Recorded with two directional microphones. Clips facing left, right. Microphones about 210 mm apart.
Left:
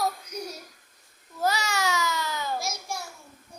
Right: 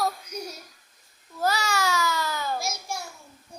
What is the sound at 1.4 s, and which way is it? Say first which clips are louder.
Babbling: right 1 dB; 20° left (ahead or behind).